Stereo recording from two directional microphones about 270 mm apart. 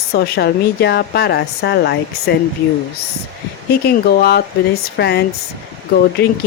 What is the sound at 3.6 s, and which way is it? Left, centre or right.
A woman's voice, left.